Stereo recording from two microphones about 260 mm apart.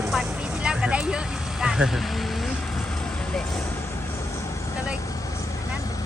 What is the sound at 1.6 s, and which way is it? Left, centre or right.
Speech, centre.